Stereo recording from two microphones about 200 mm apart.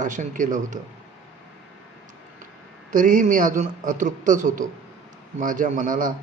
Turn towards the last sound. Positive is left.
turn(degrees=-40)  # may be behind; listen again after turning